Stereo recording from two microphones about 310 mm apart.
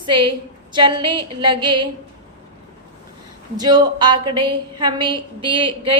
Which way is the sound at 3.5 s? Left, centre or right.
Centre.